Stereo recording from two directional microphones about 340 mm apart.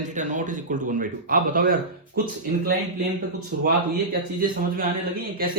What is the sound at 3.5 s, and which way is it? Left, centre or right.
A man's voice, right.